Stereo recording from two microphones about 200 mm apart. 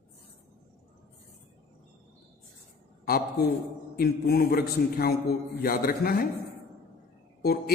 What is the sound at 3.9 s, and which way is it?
A man's voice, 50° left (ahead or behind).